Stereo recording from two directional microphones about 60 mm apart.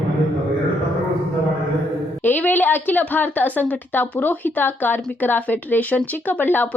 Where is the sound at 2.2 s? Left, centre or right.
Left.